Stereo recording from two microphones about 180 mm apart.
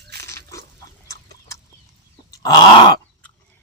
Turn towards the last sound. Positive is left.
turn(degrees=25)  # may be behind; listen again after turning